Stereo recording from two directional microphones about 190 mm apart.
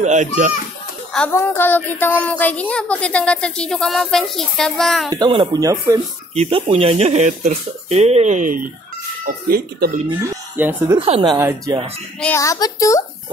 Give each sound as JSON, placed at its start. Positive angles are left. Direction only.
{"t": 0.0, "sound": "speech", "side_deg": -40}
{"t": 1.1, "sound": "a woman's voice", "side_deg": 10}
{"t": 5.1, "sound": "speech", "side_deg": -25}
{"t": 6.3, "sound": "speech", "side_deg": -35}
{"t": 10.5, "sound": "speech", "side_deg": -10}
{"t": 11.0, "sound": "speech", "side_deg": -30}
{"t": 11.3, "sound": "speech", "side_deg": -15}
{"t": 12.2, "sound": "a woman's voice", "side_deg": 15}